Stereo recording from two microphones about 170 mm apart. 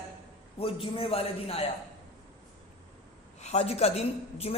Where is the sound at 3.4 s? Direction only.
40° left (ahead or behind).